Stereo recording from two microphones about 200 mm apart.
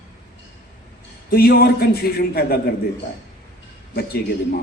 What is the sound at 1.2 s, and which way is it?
A man's voice, 50° left (ahead or behind).